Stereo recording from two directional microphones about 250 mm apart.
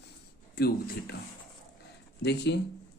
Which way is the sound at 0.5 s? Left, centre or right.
Left.